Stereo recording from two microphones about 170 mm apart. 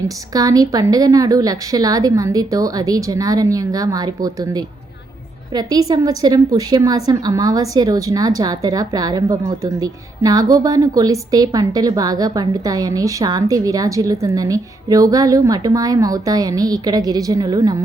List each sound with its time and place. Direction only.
0.3 s a woman's voice: 20° right (ahead or behind)